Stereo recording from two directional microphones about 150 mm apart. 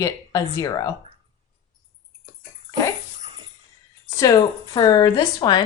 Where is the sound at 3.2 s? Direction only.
30° right (ahead or behind).